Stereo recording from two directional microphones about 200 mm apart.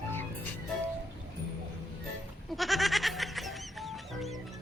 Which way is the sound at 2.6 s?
Centre (ahead or behind).